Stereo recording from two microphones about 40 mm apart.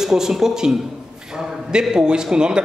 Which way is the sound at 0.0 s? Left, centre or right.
Centre.